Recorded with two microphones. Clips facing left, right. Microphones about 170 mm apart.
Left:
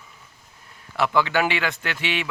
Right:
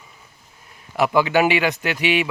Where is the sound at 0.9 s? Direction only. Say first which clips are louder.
Right 4 dB; 15° right (ahead or behind).